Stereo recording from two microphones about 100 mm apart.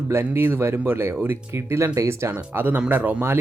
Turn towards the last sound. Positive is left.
turn(degrees=-20)  # may be behind; listen again after turning